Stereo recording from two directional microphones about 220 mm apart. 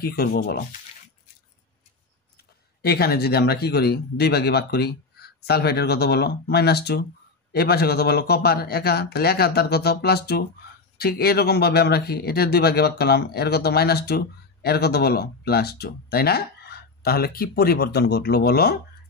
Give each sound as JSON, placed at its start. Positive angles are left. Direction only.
{"t": 0.0, "sound": "speech", "side_deg": 45}
{"t": 2.8, "sound": "speech", "side_deg": 45}